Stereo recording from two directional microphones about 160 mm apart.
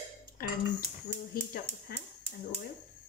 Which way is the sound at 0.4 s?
65° left (ahead or behind).